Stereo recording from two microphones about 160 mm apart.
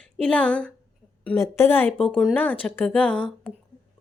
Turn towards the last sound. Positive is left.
turn(degrees=10)  # may be behind; listen again after turning